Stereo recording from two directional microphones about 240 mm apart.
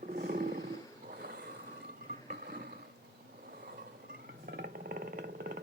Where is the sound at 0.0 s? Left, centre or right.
Right.